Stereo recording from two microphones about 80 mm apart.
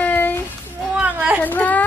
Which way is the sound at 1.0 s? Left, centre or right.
Centre.